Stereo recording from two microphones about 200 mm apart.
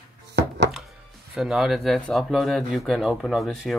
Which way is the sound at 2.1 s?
Centre (ahead or behind).